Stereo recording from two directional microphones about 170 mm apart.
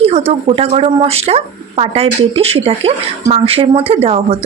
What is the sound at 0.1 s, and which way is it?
A woman's voice, 35° right (ahead or behind).